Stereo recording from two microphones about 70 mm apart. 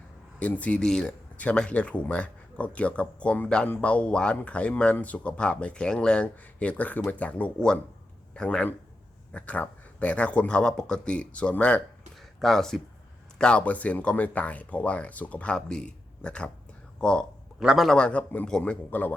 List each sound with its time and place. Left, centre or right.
0.3 s a man's voice: left
12.4 s speech: centre
13.4 s speech: centre
17.6 s a man's voice: centre
17.9 s speech: centre